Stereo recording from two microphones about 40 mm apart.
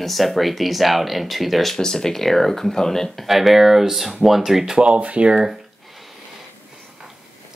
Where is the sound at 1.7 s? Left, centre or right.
Centre.